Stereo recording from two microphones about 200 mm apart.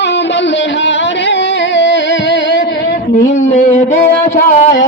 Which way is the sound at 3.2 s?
35° left (ahead or behind).